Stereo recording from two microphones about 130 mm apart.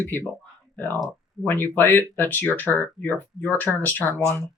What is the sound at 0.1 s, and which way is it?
Speech, 15° left (ahead or behind).